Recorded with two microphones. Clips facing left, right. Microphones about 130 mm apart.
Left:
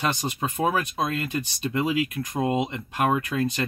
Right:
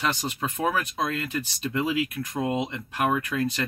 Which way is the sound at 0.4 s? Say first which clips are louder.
Left 3 dB; 20° left (ahead or behind).